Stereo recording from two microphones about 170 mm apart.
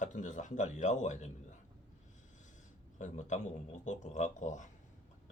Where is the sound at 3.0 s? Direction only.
45° left (ahead or behind).